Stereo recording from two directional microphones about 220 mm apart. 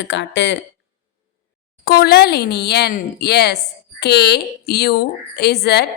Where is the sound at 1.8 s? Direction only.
45° left (ahead or behind).